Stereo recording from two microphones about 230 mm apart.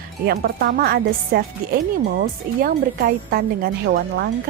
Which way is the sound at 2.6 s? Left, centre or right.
Right.